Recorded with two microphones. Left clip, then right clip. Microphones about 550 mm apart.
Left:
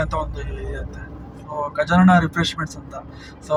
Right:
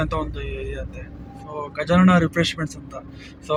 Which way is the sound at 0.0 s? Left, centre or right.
Right.